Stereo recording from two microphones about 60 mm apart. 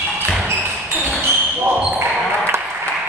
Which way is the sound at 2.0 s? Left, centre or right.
Right.